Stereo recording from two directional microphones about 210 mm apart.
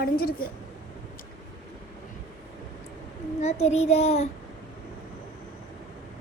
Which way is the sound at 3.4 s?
30° left (ahead or behind).